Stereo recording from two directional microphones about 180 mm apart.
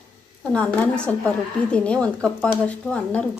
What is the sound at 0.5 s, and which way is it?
Speech, 5° left (ahead or behind).